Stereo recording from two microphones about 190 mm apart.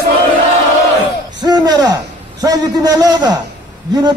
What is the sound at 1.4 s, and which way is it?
A man's voice, 20° right (ahead or behind).